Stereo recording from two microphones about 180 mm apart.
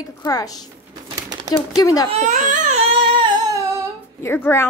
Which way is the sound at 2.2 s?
45° right (ahead or behind).